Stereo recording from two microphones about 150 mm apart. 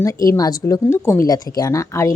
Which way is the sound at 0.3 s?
25° left (ahead or behind).